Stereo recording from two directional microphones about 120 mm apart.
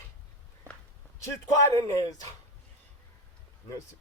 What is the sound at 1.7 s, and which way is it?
Speech, 30° left (ahead or behind).